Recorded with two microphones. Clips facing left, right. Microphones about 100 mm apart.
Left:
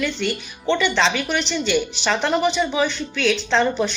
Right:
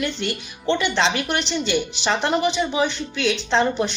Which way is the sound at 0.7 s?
15° right (ahead or behind).